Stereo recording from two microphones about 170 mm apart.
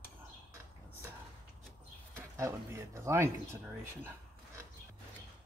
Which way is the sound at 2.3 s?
15° right (ahead or behind).